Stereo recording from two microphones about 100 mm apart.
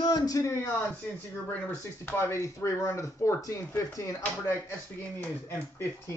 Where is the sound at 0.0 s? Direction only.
40° left (ahead or behind).